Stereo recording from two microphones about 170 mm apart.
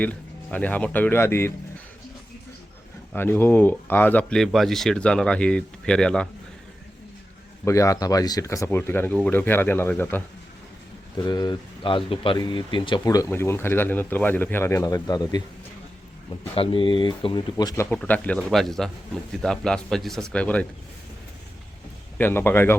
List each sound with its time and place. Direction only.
0.0 s speech: 10° left (ahead or behind)
3.1 s speech: 10° left (ahead or behind)
7.6 s speech: 20° left (ahead or behind)
11.2 s speech: 25° left (ahead or behind)
17.8 s speech: 5° left (ahead or behind)
22.2 s speech: 15° left (ahead or behind)